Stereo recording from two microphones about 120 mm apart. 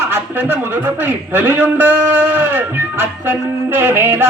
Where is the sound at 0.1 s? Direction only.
20° right (ahead or behind).